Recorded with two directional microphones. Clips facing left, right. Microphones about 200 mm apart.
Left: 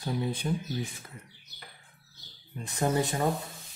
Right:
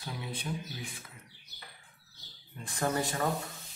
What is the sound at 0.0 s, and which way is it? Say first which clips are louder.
Speech: left 9 dB; 40° left (ahead or behind).